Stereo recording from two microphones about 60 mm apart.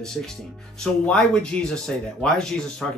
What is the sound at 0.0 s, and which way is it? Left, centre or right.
Speech, centre.